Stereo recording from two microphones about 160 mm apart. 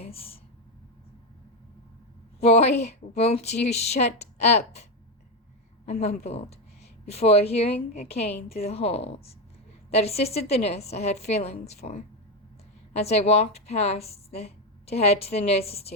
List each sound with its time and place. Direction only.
0.0 s speech: 35° left (ahead or behind)
2.4 s a woman's voice: 40° left (ahead or behind)